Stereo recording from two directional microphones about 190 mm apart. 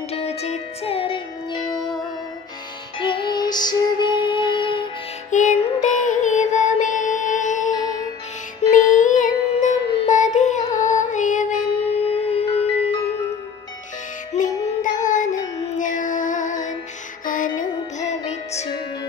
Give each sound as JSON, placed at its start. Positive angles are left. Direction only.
{"t": 0.1, "sound": "music", "side_deg": 35}
{"t": 3.0, "sound": "music", "side_deg": 25}
{"t": 5.3, "sound": "music", "side_deg": 40}
{"t": 14.3, "sound": "music", "side_deg": 40}